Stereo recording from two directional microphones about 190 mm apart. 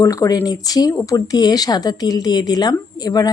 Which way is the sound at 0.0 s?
15° left (ahead or behind).